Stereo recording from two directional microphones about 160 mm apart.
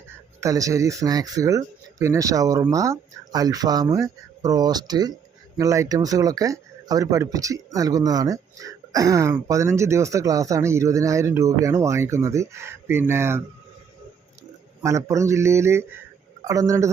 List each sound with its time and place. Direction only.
0.3 s speech: 20° right (ahead or behind)
14.8 s speech: 20° right (ahead or behind)